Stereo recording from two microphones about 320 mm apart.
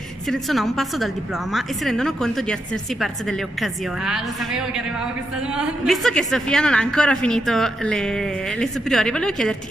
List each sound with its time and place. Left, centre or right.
0.3 s a woman's voice: centre